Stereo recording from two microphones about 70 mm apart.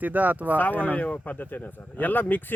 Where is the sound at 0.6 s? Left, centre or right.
Left.